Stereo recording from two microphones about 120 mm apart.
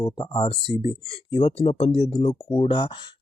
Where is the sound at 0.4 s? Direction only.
50° left (ahead or behind).